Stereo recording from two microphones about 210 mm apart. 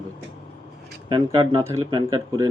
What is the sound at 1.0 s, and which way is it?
A man's voice, 20° right (ahead or behind).